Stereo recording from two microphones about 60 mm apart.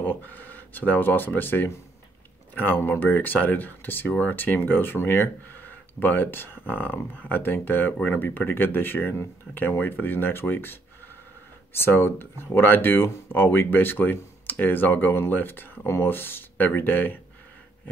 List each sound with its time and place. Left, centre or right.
0.0 s speech: left